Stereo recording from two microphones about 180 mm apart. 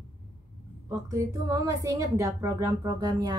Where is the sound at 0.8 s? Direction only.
20° right (ahead or behind).